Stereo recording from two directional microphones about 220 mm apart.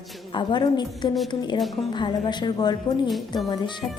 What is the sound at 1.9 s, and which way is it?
A woman's voice, 20° left (ahead or behind).